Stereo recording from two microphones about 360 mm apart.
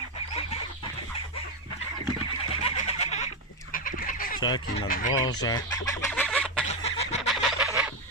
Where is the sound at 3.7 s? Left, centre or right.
Left.